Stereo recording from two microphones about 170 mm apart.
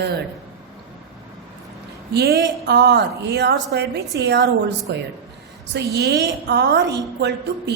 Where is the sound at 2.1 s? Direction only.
70° right (ahead or behind).